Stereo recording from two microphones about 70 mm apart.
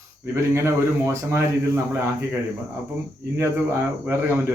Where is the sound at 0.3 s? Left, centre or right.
Right.